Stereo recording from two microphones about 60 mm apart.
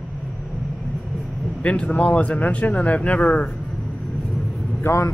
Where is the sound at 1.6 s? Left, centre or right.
Centre.